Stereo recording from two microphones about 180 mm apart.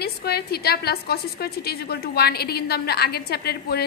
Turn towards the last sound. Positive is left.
turn(degrees=60)  # may be behind; listen again after turning